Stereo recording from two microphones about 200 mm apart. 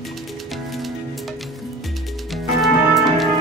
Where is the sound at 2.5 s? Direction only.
Centre (ahead or behind).